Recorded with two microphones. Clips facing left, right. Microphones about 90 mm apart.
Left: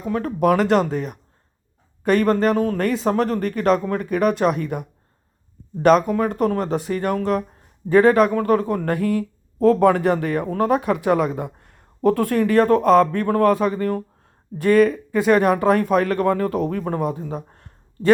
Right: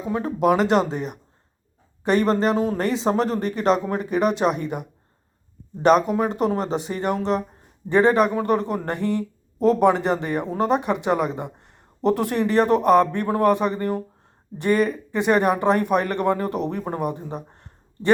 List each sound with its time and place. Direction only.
0.1 s a man's voice: 15° right (ahead or behind)
0.5 s speech: centre (ahead or behind)
2.2 s a man's voice: 20° right (ahead or behind)
6.1 s a man's voice: 20° right (ahead or behind)
6.7 s speech: centre (ahead or behind)
6.9 s a man's voice: 15° right (ahead or behind)
7.9 s speech: centre (ahead or behind)
8.9 s speech: 5° left (ahead or behind)
9.6 s a man's voice: 20° right (ahead or behind)
10.0 s speech: centre (ahead or behind)
10.4 s a man's voice: 15° right (ahead or behind)
10.8 s speech: centre (ahead or behind)
11.7 s a man's voice: 15° right (ahead or behind)
17.3 s a sound: 15° right (ahead or behind)